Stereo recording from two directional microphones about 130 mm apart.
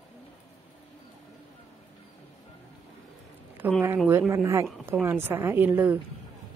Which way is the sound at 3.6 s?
15° right (ahead or behind).